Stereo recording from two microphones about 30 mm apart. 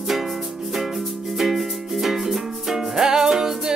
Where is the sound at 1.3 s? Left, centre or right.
Centre.